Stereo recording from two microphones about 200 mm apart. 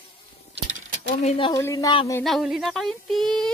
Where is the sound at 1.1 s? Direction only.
35° left (ahead or behind).